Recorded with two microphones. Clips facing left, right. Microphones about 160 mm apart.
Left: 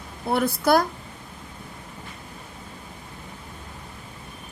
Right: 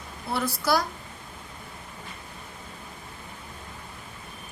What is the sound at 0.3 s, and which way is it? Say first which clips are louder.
Speech: left 6 dB; 55° left (ahead or behind).